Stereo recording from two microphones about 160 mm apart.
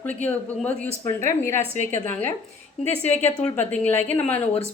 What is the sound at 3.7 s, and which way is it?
Speech, 10° left (ahead or behind).